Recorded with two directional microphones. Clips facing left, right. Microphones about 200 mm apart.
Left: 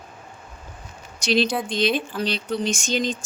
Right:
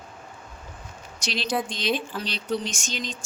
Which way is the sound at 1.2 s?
55° left (ahead or behind).